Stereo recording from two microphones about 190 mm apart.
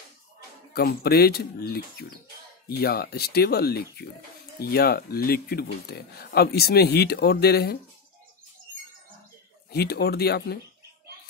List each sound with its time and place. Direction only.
0.7 s speech: 55° left (ahead or behind)
9.7 s speech: 55° left (ahead or behind)